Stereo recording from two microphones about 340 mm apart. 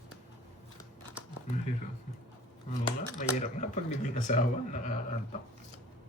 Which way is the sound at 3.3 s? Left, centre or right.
Left.